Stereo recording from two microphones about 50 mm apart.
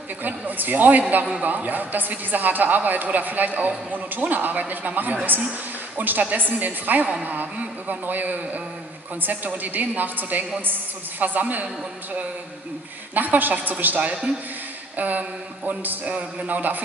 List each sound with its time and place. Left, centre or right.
0.2 s speech: right
13.1 s speech: right